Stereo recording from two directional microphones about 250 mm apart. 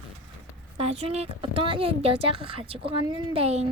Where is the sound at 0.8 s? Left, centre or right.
Right.